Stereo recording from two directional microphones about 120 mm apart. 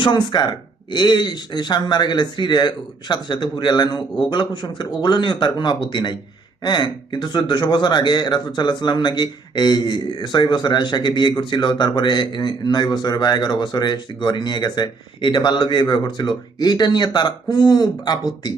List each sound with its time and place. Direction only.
0.0 s speech: 40° left (ahead or behind)